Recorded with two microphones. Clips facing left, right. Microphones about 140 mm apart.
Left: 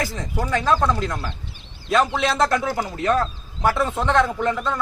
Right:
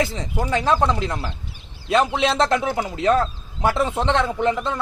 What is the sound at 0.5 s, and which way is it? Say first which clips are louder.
Speech: right 1 dB; 25° right (ahead or behind).